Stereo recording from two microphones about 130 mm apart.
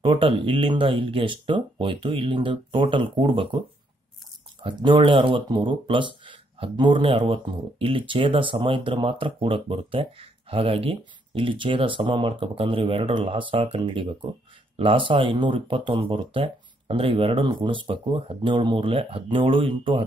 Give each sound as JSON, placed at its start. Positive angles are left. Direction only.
{"t": 0.0, "sound": "speech", "side_deg": -45}
{"t": 4.6, "sound": "speech", "side_deg": -40}